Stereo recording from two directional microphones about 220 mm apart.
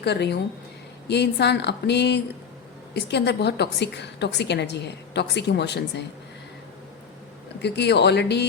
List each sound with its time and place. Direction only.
0.0 s a woman's voice: 50° left (ahead or behind)
7.6 s a woman's voice: 50° left (ahead or behind)